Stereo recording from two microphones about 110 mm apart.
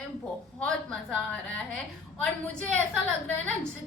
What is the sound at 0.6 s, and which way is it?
A woman's voice, 5° left (ahead or behind).